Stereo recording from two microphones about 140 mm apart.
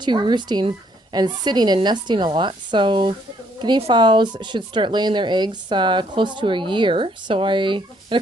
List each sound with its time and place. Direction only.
0.0 s speech: 35° right (ahead or behind)